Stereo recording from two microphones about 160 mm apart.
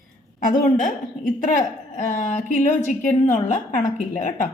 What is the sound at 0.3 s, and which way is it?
A woman's voice, 55° left (ahead or behind).